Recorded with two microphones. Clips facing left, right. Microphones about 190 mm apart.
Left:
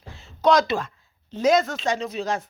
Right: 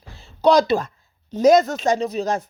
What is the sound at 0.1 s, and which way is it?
A woman's voice, 35° right (ahead or behind).